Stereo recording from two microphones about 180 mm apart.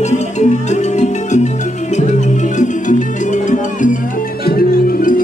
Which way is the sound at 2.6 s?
45° left (ahead or behind).